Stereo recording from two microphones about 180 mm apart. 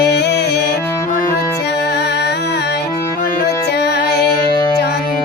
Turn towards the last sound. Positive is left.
turn(degrees=60)  # may be behind; listen again after turning